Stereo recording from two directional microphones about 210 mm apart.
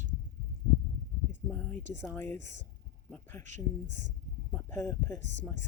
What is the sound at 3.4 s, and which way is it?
Speech, 35° right (ahead or behind).